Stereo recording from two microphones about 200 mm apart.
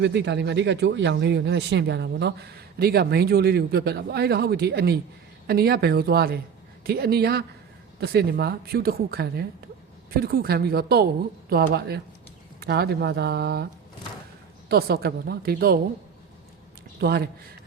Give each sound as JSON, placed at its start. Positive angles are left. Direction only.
{"t": 0.0, "sound": "a woman's voice", "side_deg": -60}
{"t": 14.7, "sound": "a woman's voice", "side_deg": -50}
{"t": 17.0, "sound": "a woman's voice", "side_deg": -55}